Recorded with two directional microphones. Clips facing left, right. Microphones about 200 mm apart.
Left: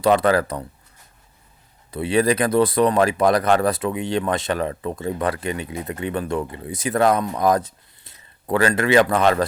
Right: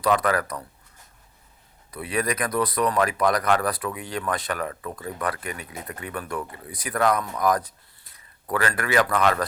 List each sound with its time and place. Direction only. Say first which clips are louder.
0.0 s speech: left 5 dB; 30° left (ahead or behind)
1.9 s speech: left 8 dB; 30° left (ahead or behind)